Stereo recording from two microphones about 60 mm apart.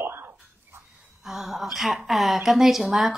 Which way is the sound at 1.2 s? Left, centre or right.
Centre.